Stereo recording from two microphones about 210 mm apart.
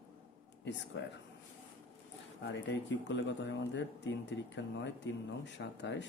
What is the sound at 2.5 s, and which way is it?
Speech, 55° left (ahead or behind).